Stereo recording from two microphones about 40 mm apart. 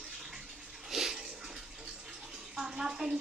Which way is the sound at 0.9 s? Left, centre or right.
Centre.